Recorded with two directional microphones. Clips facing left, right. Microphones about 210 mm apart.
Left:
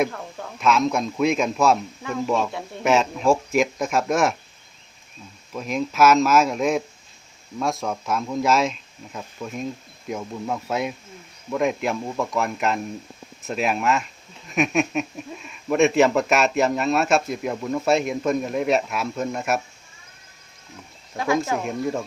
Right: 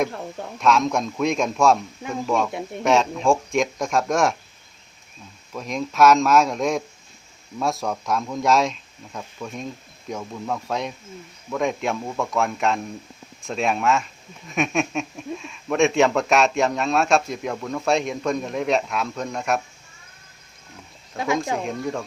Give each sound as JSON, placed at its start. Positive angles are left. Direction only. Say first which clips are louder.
{"t": 0.6, "sound": "speech", "louder": "even", "side_deg": 5}
{"t": 2.5, "sound": "speech", "louder": "right 3 dB", "side_deg": -20}
{"t": 2.8, "sound": "speech", "louder": "even", "side_deg": 5}
{"t": 5.5, "sound": "speech", "louder": "even", "side_deg": 5}
{"t": 21.6, "sound": "speech", "louder": "left 1 dB", "side_deg": 5}